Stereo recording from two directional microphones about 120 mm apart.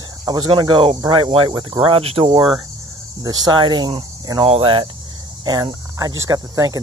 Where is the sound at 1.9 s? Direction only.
50° right (ahead or behind).